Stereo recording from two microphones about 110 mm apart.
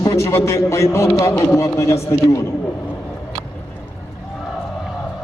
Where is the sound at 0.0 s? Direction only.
30° left (ahead or behind).